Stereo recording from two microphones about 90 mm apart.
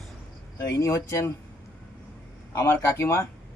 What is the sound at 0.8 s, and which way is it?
Speech, 35° left (ahead or behind).